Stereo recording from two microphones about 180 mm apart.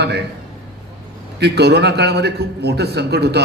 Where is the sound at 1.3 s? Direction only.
65° right (ahead or behind).